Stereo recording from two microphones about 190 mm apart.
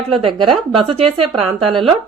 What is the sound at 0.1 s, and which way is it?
Speech, 30° right (ahead or behind).